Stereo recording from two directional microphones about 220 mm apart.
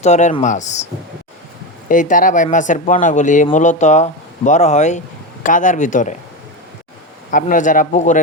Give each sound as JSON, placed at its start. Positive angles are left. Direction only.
{"t": 0.0, "sound": "speech", "side_deg": 30}
{"t": 1.9, "sound": "speech", "side_deg": 35}
{"t": 7.3, "sound": "speech", "side_deg": 35}